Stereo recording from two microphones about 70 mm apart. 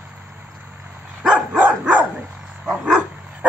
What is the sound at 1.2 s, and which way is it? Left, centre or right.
Dog, centre.